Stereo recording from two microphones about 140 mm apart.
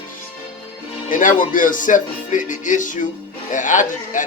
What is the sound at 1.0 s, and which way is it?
Speech, 70° left (ahead or behind).